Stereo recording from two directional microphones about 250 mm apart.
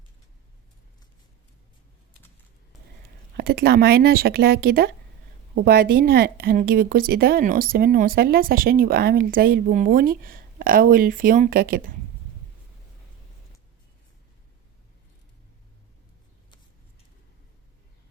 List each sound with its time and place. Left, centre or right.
3.3 s a woman's voice: right